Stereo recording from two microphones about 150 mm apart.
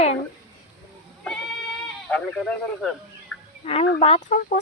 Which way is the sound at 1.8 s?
5° left (ahead or behind).